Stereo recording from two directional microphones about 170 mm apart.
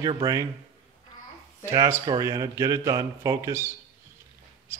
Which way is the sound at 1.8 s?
20° right (ahead or behind).